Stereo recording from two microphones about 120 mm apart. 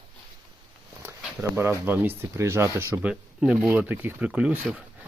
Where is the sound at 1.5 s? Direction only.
20° right (ahead or behind).